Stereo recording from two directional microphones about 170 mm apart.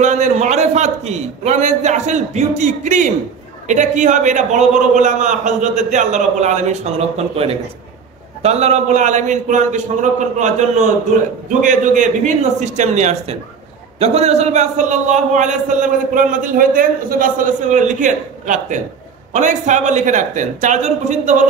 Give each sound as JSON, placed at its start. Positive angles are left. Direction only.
{"t": 0.0, "sound": "a man's voice", "side_deg": -45}